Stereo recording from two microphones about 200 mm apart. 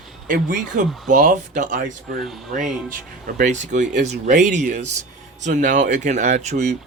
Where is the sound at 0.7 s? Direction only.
40° right (ahead or behind).